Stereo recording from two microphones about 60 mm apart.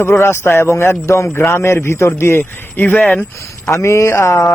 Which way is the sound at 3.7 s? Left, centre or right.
Left.